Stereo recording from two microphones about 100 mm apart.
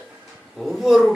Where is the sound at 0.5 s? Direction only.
5° right (ahead or behind).